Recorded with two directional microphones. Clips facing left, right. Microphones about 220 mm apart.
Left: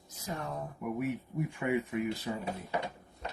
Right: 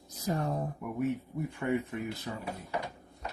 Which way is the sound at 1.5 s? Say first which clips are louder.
Even; 15° left (ahead or behind).